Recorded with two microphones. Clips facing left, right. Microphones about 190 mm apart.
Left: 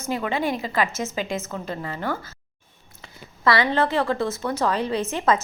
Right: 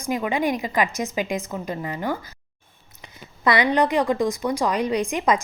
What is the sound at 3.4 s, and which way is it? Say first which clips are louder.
Speech: right 1 dB; 15° right (ahead or behind).